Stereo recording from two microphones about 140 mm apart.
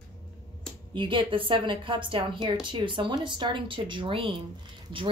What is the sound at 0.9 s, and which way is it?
A woman's voice, 35° right (ahead or behind).